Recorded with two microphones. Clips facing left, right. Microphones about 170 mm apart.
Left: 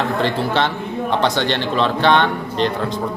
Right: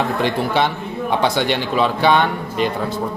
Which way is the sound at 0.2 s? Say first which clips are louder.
Right 1 dB; 15° right (ahead or behind).